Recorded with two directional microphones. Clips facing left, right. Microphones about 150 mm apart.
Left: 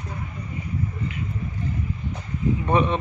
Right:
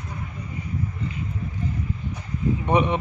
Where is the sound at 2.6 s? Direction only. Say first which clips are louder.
Right 1 dB; 20° right (ahead or behind).